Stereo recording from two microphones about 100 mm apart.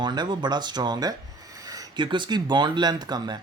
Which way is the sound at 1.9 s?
55° right (ahead or behind).